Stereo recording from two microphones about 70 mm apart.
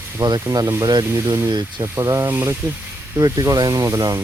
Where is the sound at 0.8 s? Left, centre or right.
Right.